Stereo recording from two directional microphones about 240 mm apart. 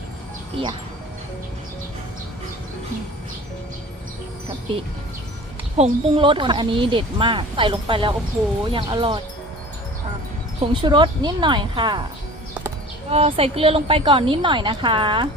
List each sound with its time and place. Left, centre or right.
0.6 s speech: right
5.7 s speech: right
10.6 s speech: centre
13.1 s speech: right